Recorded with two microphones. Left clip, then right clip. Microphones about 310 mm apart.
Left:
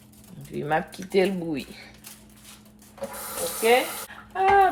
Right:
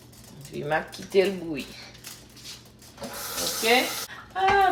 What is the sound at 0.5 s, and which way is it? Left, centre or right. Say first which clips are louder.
Speech: left 1 dB; left.